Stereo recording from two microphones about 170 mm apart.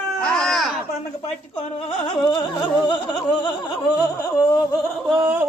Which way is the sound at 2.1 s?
30° left (ahead or behind).